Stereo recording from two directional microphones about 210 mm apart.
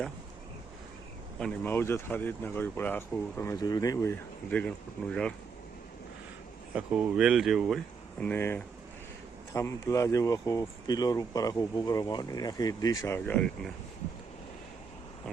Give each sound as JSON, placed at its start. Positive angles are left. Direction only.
{"t": 1.4, "sound": "speech", "side_deg": 5}
{"t": 6.7, "sound": "speech", "side_deg": -5}
{"t": 8.2, "sound": "speech", "side_deg": 10}